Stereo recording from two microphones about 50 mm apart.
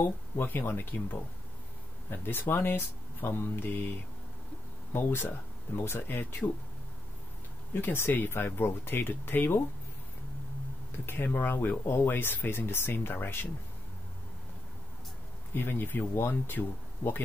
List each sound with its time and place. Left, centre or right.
0.4 s speech: left
7.7 s speech: left
11.3 s speech: left
11.8 s speech: left
12.1 s speech: left
15.5 s speech: left